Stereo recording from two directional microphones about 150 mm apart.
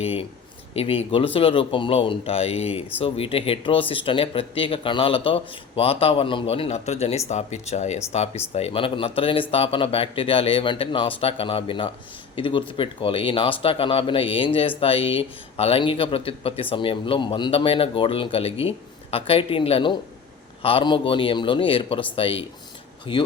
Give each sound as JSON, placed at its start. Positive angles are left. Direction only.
{"t": 0.0, "sound": "speech", "side_deg": 40}